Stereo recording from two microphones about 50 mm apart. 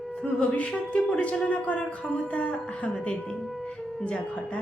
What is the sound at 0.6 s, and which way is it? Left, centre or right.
A woman's voice, left.